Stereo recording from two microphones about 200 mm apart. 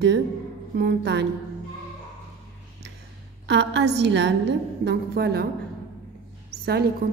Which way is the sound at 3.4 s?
60° right (ahead or behind).